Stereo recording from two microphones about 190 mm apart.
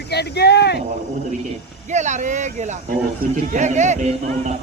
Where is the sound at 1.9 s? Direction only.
40° right (ahead or behind).